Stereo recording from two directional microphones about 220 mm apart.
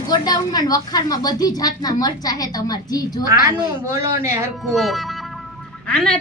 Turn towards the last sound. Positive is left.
turn(degrees=5)  # may be behind; listen again after turning